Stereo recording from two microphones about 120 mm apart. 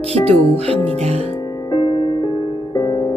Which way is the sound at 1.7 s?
40° left (ahead or behind).